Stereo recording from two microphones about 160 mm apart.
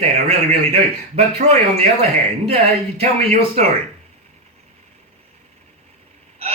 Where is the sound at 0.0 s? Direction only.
40° right (ahead or behind).